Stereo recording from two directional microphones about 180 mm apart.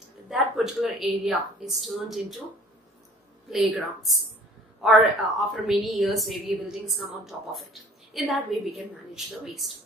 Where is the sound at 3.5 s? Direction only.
Centre (ahead or behind).